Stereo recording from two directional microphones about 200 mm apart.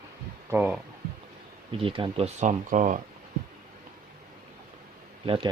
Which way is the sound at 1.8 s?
25° right (ahead or behind).